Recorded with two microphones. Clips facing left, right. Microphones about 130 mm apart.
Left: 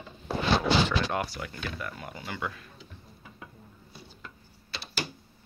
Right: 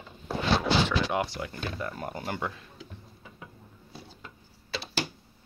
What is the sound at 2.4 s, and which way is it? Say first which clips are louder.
Speech: right 1 dB; 25° right (ahead or behind).